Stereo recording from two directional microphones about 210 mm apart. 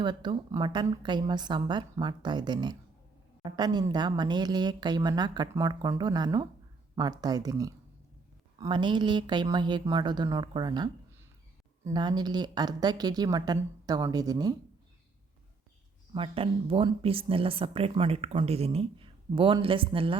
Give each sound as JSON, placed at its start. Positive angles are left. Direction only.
{"t": 0.0, "sound": "speech", "side_deg": -20}
{"t": 11.9, "sound": "speech", "side_deg": -20}
{"t": 16.1, "sound": "speech", "side_deg": -25}